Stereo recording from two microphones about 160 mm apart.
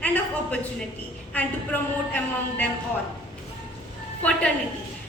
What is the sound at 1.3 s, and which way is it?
A woman's voice, 10° left (ahead or behind).